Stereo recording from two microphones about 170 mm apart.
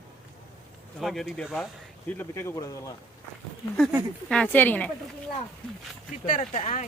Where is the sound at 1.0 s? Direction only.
Centre (ahead or behind).